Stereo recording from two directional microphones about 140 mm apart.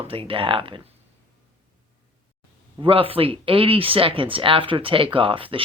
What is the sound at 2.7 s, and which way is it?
Speech, 40° right (ahead or behind).